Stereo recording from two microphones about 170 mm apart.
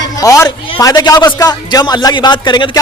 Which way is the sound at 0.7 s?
20° left (ahead or behind).